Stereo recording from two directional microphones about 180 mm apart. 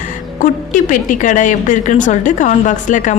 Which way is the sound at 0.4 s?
45° left (ahead or behind).